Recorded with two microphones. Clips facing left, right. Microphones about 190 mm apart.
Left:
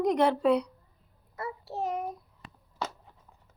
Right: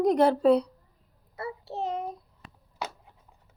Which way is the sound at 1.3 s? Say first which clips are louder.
Right 1 dB; 25° right (ahead or behind).